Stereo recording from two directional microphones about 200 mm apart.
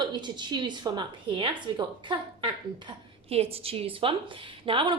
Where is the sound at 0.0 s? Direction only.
20° right (ahead or behind).